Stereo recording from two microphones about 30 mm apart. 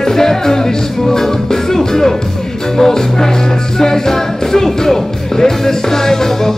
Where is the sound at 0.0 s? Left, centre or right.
Centre.